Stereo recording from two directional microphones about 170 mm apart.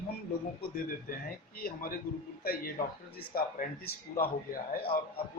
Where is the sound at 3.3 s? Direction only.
60° left (ahead or behind).